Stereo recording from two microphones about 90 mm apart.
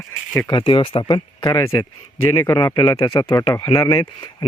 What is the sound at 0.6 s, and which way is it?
Speech, 85° left.